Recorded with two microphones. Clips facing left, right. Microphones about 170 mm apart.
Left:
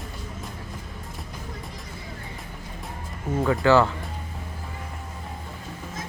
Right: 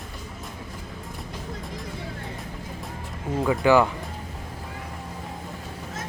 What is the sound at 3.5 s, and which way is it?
Speech, 15° right (ahead or behind).